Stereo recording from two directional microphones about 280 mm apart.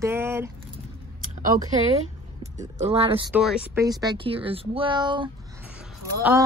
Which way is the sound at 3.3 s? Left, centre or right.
Centre.